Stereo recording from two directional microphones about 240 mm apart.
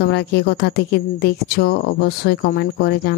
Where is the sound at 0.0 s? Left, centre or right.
Left.